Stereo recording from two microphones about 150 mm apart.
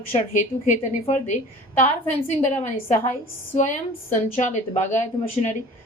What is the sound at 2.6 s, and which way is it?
A woman's voice, 50° left (ahead or behind).